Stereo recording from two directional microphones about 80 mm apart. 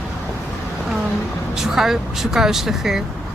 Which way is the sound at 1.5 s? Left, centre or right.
Centre.